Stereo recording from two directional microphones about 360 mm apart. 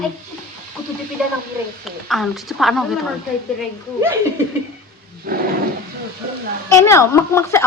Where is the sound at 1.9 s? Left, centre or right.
Centre.